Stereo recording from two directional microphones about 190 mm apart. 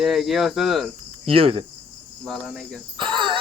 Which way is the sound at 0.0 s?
Centre (ahead or behind).